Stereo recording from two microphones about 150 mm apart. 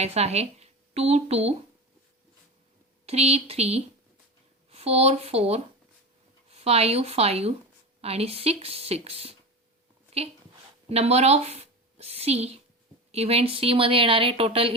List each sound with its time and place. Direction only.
0.0 s speech: 45° right (ahead or behind)
3.1 s speech: 45° right (ahead or behind)
10.8 s a woman's voice: 45° right (ahead or behind)